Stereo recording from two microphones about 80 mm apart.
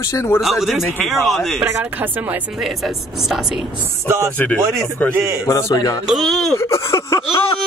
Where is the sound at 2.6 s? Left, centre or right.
Centre.